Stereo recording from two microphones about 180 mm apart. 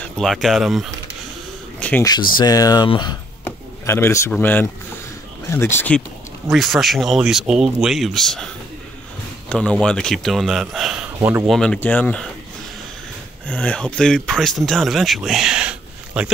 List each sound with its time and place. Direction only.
0.0 s speech: centre (ahead or behind)
1.8 s a sound: 10° left (ahead or behind)
2.3 s speech: 20° left (ahead or behind)
3.4 s a sound: 15° left (ahead or behind)
4.3 s speech: 10° left (ahead or behind)
5.8 s speech: 5° left (ahead or behind)
9.5 s speech: 5° left (ahead or behind)
11.1 s speech: 15° right (ahead or behind)
11.4 s speech: centre (ahead or behind)
13.5 s speech: 5° left (ahead or behind)